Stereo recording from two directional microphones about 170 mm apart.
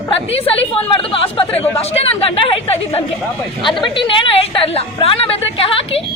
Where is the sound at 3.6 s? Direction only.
30° left (ahead or behind).